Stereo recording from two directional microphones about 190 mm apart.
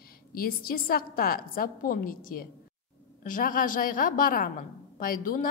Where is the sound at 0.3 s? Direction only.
50° left (ahead or behind).